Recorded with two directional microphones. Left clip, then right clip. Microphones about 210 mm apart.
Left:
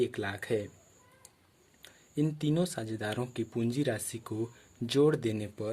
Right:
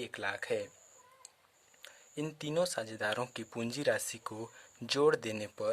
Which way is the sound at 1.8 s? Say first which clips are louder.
Left 7 dB; 20° right (ahead or behind).